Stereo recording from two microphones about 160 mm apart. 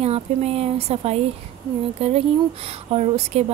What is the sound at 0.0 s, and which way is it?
Speech, 40° right (ahead or behind).